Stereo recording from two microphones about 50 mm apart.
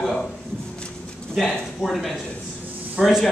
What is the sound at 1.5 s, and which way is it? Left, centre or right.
Speech, centre.